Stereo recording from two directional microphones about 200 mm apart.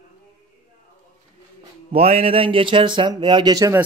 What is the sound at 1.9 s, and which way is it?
Speech, 30° right (ahead or behind).